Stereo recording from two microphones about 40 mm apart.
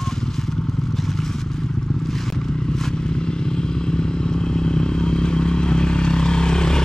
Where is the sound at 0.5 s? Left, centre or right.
Centre.